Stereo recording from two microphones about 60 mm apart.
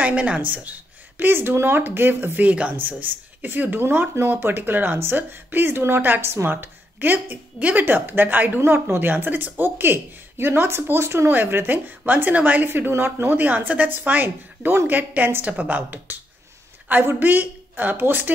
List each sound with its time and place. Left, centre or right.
0.0 s speech: right
2.4 s a woman's voice: right
11.3 s speech: right
12.6 s speech: right
13.4 s speech: right